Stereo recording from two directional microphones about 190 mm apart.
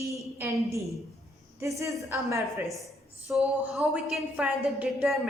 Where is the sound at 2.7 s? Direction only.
Centre (ahead or behind).